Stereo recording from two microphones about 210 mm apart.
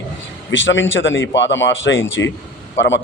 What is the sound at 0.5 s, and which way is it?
Speech, 60° left (ahead or behind).